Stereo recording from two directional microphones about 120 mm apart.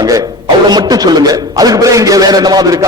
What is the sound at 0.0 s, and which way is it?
A man's voice, 30° right (ahead or behind).